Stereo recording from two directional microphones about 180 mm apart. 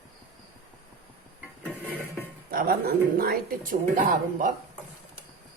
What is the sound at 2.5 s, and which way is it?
Speech, 55° right (ahead or behind).